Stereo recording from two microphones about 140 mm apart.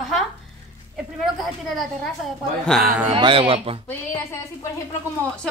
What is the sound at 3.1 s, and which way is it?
Speech, 35° right (ahead or behind).